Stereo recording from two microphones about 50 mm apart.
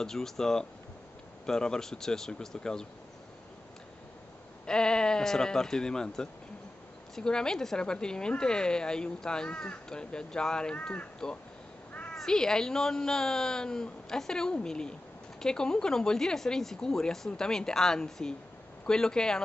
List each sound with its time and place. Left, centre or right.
0.0 s speech: centre
4.6 s speech: centre
11.9 s crow: left
12.2 s speech: centre